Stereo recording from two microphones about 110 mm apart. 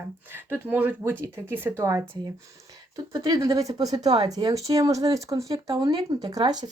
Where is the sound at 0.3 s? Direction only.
20° right (ahead or behind).